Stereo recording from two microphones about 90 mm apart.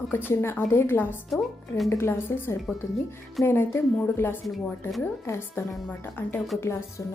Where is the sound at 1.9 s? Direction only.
30° left (ahead or behind).